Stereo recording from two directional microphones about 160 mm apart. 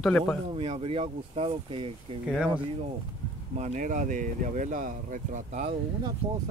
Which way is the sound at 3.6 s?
50° right (ahead or behind).